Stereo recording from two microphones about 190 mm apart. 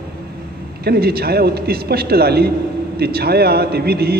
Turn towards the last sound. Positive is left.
turn(degrees=-55)  # may be behind; listen again after turning